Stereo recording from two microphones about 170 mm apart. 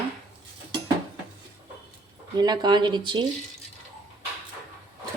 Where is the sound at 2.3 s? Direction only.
25° right (ahead or behind).